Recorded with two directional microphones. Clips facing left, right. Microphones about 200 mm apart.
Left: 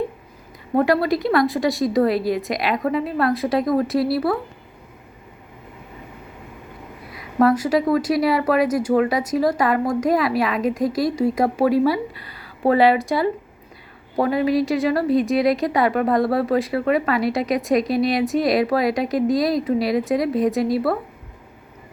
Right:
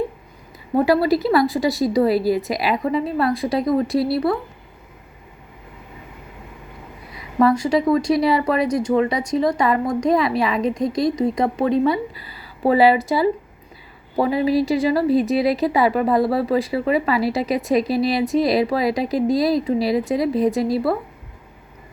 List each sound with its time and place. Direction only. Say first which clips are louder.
0.8 s a woman's voice: right 2 dB; centre (ahead or behind)
7.1 s a woman's voice: even; centre (ahead or behind)